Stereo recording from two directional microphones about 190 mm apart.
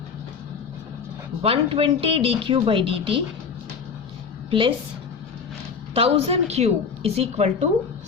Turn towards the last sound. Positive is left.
turn(degrees=-35)  # may be behind; listen again after turning